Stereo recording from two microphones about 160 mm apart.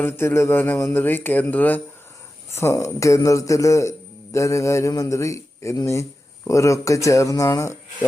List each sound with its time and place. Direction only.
0.0 s music: 15° left (ahead or behind)
2.5 s speech: 15° left (ahead or behind)